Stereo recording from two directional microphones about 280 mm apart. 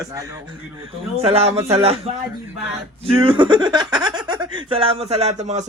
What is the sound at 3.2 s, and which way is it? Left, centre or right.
Speech, centre.